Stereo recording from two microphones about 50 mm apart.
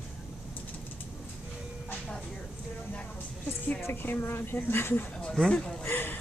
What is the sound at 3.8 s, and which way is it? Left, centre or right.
Speech, left.